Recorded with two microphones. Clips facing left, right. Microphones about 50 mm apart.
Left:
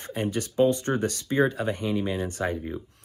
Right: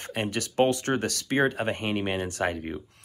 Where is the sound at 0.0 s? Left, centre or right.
Right.